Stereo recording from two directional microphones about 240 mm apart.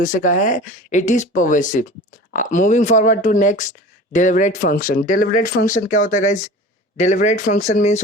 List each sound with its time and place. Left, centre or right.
0.0 s speech: left